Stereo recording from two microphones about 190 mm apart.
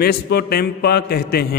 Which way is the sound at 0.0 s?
55° left (ahead or behind).